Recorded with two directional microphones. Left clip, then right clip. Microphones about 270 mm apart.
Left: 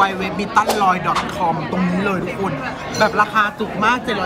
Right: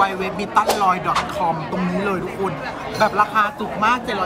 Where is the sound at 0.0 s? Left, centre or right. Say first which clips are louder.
Left 2 dB; centre.